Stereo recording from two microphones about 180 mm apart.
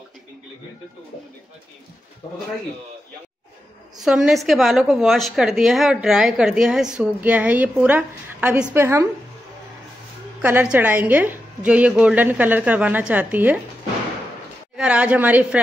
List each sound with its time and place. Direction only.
2.2 s speech: 35° left (ahead or behind)
4.0 s a woman's voice: centre (ahead or behind)
10.4 s a woman's voice: 10° right (ahead or behind)
14.8 s a woman's voice: 5° right (ahead or behind)